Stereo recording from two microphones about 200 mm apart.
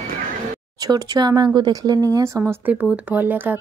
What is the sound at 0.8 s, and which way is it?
Speech, 20° right (ahead or behind).